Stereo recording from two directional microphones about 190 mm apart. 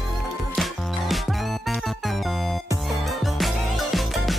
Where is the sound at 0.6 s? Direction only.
Centre (ahead or behind).